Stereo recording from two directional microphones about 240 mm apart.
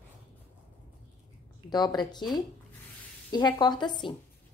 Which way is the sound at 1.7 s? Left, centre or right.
Centre.